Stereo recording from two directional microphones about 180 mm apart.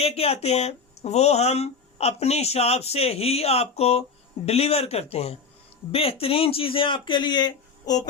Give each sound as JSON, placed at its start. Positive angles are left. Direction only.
{"t": 0.0, "sound": "speech", "side_deg": 35}